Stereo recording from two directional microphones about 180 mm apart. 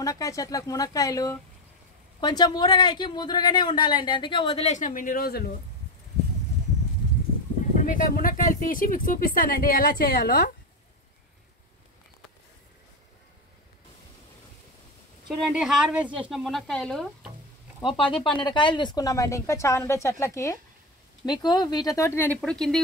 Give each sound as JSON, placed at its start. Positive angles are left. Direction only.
{"t": 0.0, "sound": "speech", "side_deg": 20}
{"t": 7.7, "sound": "speech", "side_deg": 50}
{"t": 15.2, "sound": "speech", "side_deg": 0}
{"t": 17.8, "sound": "speech", "side_deg": 30}